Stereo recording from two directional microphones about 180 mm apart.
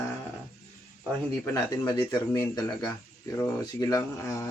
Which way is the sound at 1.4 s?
25° left (ahead or behind).